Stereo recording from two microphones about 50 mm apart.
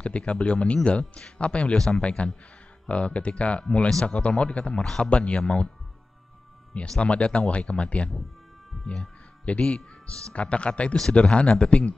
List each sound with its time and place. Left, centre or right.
0.0 s speech: left
4.8 s speech: centre
5.1 s speech: left
7.0 s speech: left
9.4 s speech: left